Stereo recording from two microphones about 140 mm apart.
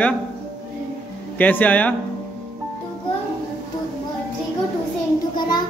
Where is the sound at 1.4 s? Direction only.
10° left (ahead or behind).